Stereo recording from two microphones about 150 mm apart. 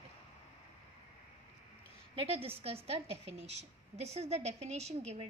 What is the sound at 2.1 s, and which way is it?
A woman's voice, 40° right (ahead or behind).